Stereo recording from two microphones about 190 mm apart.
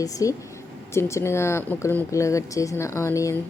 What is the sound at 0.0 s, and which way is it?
A woman's voice, 20° left (ahead or behind).